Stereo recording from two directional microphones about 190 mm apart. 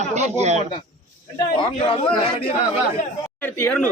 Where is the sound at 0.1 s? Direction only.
35° right (ahead or behind).